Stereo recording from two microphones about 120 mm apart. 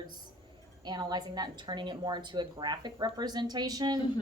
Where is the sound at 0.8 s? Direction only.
35° right (ahead or behind).